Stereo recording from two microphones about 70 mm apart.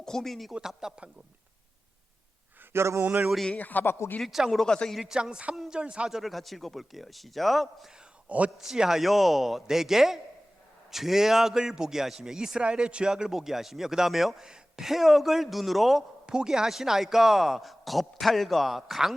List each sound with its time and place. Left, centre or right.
0.0 s speech: centre
2.7 s speech: right
3.0 s a sound: right
3.6 s speech: left
4.2 s a man's voice: centre
4.6 s speech: centre
4.9 s a man's voice: centre